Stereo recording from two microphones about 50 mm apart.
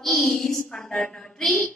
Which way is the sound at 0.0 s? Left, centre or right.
Centre.